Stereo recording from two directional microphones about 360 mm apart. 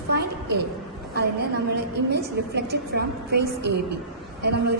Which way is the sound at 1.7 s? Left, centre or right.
Right.